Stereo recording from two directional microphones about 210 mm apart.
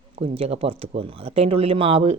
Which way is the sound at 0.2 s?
30° right (ahead or behind).